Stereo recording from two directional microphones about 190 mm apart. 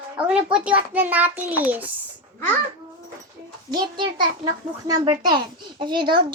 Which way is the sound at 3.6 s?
25° right (ahead or behind).